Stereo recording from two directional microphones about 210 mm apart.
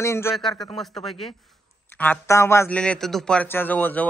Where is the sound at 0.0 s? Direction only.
15° left (ahead or behind).